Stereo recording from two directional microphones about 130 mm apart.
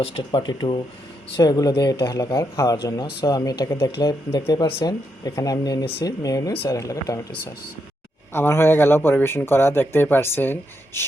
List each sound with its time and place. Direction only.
0.0 s speech: 45° left (ahead or behind); by 7.2 s 25° left (ahead or behind)
8.3 s speech: 15° left (ahead or behind)